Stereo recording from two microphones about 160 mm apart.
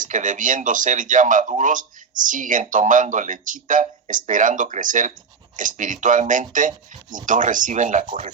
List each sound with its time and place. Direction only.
0.0 s speech: 55° right (ahead or behind)